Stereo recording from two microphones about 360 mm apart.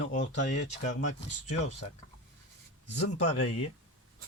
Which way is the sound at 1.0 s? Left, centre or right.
Centre.